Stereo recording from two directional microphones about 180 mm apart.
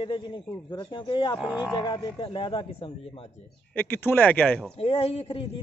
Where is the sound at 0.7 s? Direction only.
30° left (ahead or behind).